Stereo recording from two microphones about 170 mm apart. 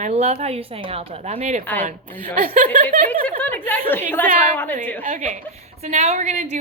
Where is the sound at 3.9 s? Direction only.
10° left (ahead or behind).